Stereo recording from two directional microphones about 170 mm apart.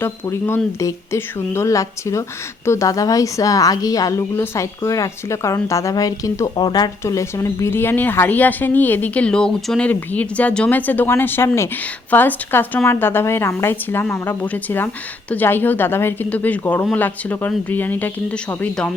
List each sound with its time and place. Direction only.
0.0 s a woman's voice: 15° left (ahead or behind)